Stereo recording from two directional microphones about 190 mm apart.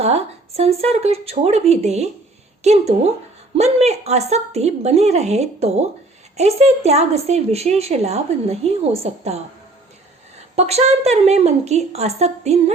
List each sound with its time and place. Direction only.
0.0 s a woman's voice: 35° right (ahead or behind)
10.5 s a woman's voice: 35° right (ahead or behind)